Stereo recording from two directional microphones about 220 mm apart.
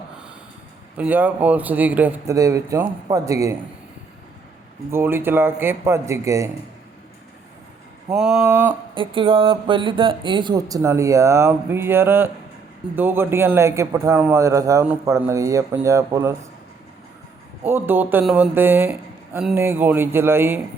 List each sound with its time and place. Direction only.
0.9 s a man's voice: 5° right (ahead or behind)
4.9 s a man's voice: 10° right (ahead or behind)
8.1 s a sound: centre (ahead or behind)
9.0 s a man's voice: 25° right (ahead or behind)
17.7 s a man's voice: 10° right (ahead or behind)